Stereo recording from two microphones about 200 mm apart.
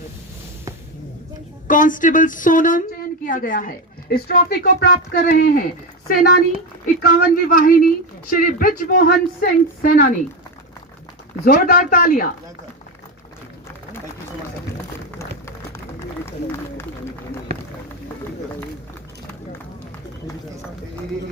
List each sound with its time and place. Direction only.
1.6 s speech: 40° left (ahead or behind)
6.8 s speech: 50° left (ahead or behind)
11.4 s speech: 45° left (ahead or behind)
16.0 s run: 10° left (ahead or behind)